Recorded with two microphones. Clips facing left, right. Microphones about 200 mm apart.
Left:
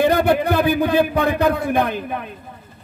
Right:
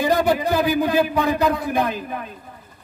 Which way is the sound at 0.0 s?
60° left (ahead or behind).